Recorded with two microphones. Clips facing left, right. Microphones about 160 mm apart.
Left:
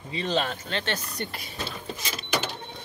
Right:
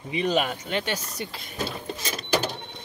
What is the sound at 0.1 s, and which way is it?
Speech, 15° right (ahead or behind).